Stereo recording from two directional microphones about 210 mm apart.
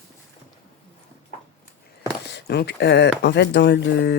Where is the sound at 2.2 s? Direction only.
55° left (ahead or behind).